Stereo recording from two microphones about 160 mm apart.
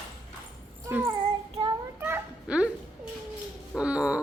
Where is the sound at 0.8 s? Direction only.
15° right (ahead or behind).